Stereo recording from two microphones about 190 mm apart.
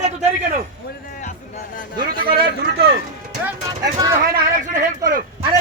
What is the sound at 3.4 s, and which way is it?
Speech, 15° right (ahead or behind).